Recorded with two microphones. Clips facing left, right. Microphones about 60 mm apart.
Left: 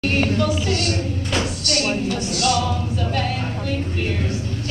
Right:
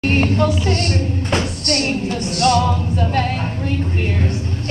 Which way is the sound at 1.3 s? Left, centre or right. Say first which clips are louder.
Right 3 dB; right.